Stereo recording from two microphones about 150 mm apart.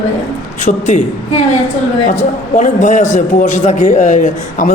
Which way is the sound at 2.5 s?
55° left (ahead or behind).